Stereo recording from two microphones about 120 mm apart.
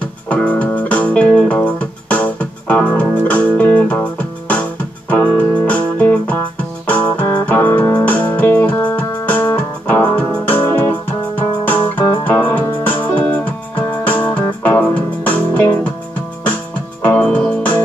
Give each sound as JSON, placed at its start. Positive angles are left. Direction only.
{"t": 0.3, "sound": "music", "side_deg": 10}
{"t": 17.0, "sound": "music", "side_deg": 10}